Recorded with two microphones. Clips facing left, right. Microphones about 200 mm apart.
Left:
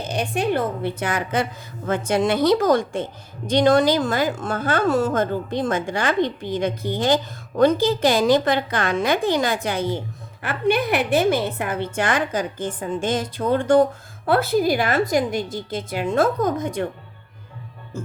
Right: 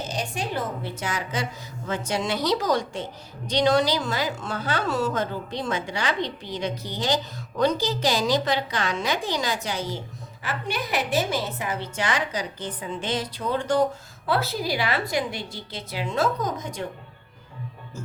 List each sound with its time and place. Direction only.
0.1 s a woman's voice: 60° left (ahead or behind)